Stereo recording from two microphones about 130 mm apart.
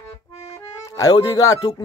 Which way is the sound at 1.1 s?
30° left (ahead or behind).